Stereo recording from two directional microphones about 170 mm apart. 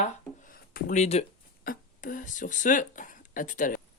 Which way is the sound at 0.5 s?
60° left (ahead or behind).